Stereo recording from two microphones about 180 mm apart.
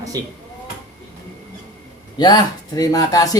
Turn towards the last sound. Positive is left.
turn(degrees=20)  # may be behind; listen again after turning